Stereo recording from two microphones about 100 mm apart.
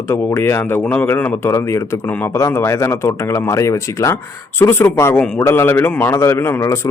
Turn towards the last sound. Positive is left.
turn(degrees=30)  # may be behind; listen again after turning